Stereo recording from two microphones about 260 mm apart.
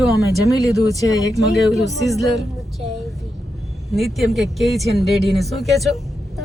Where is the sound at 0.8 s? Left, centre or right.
Centre.